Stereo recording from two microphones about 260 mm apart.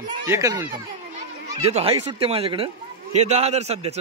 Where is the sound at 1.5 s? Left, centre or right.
Right.